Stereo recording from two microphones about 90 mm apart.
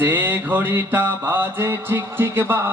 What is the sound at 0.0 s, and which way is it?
Music, 20° right (ahead or behind).